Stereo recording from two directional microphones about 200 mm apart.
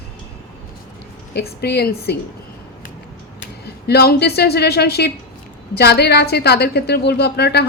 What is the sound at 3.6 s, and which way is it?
A woman's voice, 55° left (ahead or behind).